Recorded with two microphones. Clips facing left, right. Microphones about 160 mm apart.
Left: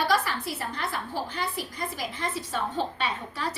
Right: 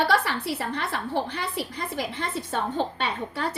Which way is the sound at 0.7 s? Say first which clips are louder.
Right 4 dB; 70° right (ahead or behind).